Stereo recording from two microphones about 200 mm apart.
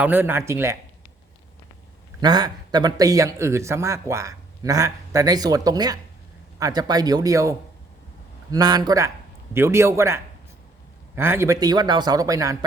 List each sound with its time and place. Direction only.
0.0 s speech: 10° right (ahead or behind)
2.2 s speech: 20° right (ahead or behind)
8.5 s speech: 20° right (ahead or behind)